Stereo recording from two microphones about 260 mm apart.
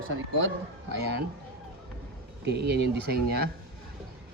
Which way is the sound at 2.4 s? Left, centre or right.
Right.